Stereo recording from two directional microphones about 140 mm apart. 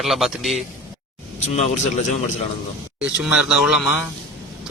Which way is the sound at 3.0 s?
5° right (ahead or behind).